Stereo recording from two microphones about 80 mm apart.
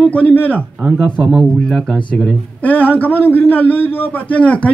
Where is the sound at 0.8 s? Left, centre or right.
Centre.